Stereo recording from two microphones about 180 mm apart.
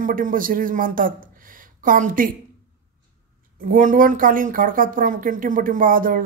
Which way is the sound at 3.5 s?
50° right (ahead or behind).